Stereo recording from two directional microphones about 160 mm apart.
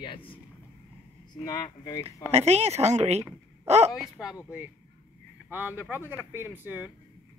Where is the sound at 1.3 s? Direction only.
20° left (ahead or behind).